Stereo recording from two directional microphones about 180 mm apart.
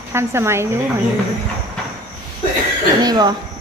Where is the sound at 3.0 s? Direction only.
20° right (ahead or behind).